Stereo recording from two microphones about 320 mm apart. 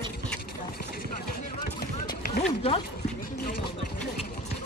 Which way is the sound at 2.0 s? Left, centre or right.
Centre.